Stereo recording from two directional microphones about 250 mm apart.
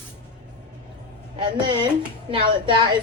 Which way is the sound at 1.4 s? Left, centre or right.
Centre.